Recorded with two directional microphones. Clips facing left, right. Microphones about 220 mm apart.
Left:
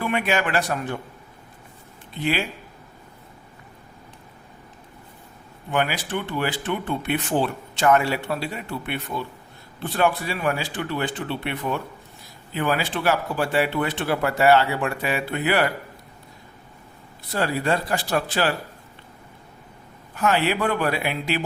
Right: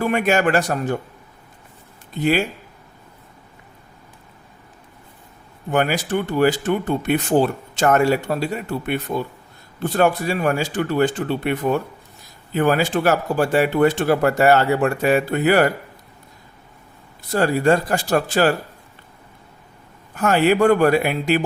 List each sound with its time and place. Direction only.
0.0 s speech: 45° right (ahead or behind)
2.1 s speech: 45° right (ahead or behind)
5.7 s speech: 45° right (ahead or behind)
17.3 s speech: 45° right (ahead or behind)
20.1 s speech: 45° right (ahead or behind)